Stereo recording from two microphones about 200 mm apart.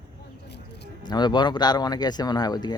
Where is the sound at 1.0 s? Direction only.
20° left (ahead or behind).